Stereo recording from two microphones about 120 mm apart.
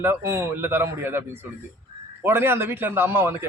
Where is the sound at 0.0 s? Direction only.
20° right (ahead or behind).